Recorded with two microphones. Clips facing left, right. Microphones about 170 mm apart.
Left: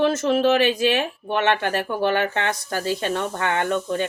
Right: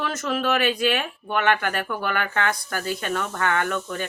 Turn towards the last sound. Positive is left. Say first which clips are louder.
# left 3 dB
turn(degrees=25)  # may be behind; listen again after turning